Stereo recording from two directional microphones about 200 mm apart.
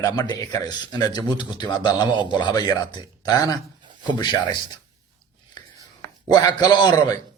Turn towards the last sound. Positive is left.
turn(degrees=20)  # may be behind; listen again after turning